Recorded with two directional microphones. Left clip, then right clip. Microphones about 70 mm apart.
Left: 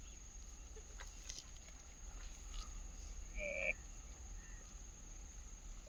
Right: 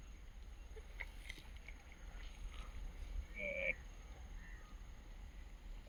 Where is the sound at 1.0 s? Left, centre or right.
Left.